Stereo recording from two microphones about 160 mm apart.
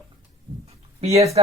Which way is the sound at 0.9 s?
40° right (ahead or behind).